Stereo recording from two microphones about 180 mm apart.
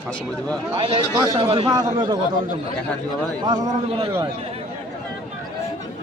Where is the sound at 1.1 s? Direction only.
20° right (ahead or behind).